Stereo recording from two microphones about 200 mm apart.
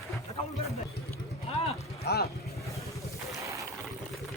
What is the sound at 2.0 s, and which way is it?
Speech, 55° left (ahead or behind).